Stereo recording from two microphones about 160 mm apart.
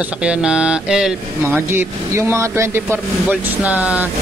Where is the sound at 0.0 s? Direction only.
5° right (ahead or behind).